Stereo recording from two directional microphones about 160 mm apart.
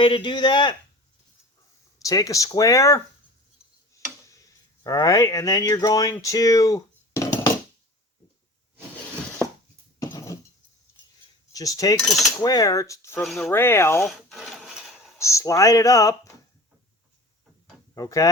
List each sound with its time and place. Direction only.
0.0 s speech: 30° left (ahead or behind)
2.0 s speech: 20° left (ahead or behind)
4.8 s speech: 20° left (ahead or behind)
6.1 s dishes: 20° left (ahead or behind)
10.0 s a sound: 20° left (ahead or behind)
11.5 s speech: 20° left (ahead or behind)
11.9 s cutlery: centre (ahead or behind)
12.4 s speech: 20° left (ahead or behind)
13.2 s cutlery: centre (ahead or behind)
13.5 s speech: 15° left (ahead or behind)
14.0 s wood: centre (ahead or behind)
15.2 s speech: 20° left (ahead or behind)
17.9 s speech: 20° left (ahead or behind)